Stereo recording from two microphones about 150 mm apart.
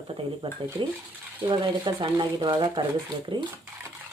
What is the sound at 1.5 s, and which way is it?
Speech, 35° right (ahead or behind).